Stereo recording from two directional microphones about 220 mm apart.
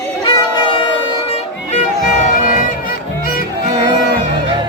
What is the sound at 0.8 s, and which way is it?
Music, 25° left (ahead or behind).